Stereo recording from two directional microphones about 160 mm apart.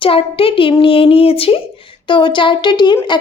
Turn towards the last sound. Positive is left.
turn(degrees=30)  # may be behind; listen again after turning